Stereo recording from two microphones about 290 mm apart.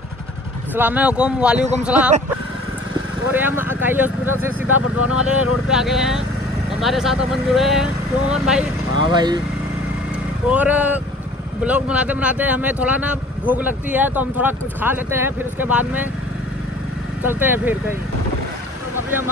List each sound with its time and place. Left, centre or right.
0.7 s speech: centre
1.6 s speech: right
3.3 s speech: centre
8.9 s speech: centre
10.5 s speech: centre
17.2 s speech: centre